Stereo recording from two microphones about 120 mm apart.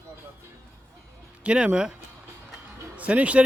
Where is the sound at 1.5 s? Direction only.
10° right (ahead or behind).